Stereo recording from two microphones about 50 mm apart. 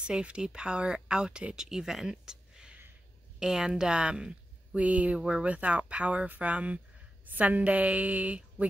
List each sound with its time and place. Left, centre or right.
0.0 s speech: centre